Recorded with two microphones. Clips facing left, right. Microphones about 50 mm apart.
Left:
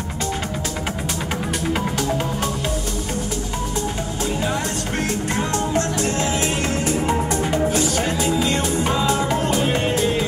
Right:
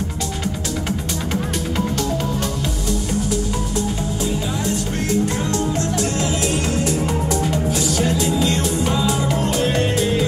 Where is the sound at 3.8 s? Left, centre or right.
Left.